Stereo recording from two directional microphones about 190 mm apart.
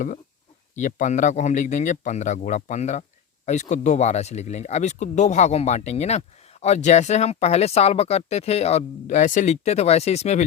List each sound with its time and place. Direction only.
0.8 s speech: 40° left (ahead or behind)